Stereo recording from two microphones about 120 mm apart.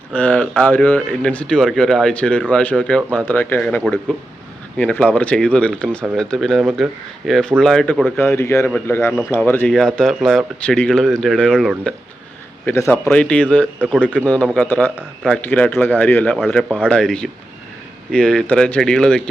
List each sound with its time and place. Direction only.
0.1 s speech: 10° left (ahead or behind)
8.1 s a man's voice: 20° left (ahead or behind)
12.6 s speech: 20° left (ahead or behind)